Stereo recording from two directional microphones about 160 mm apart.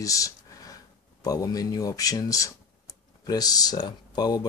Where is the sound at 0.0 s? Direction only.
20° left (ahead or behind).